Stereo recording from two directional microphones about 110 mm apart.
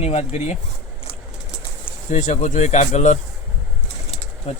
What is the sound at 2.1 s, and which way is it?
Speech, 90° left.